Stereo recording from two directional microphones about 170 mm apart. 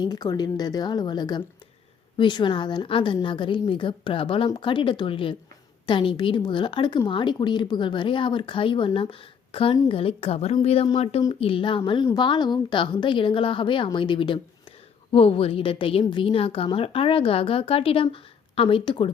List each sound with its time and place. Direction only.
0.0 s a woman's voice: 20° left (ahead or behind)